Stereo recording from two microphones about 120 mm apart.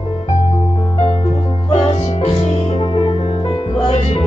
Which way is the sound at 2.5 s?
50° left (ahead or behind).